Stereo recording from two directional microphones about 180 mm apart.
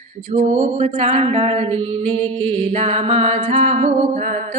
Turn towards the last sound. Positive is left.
turn(degrees=-40)  # may be behind; listen again after turning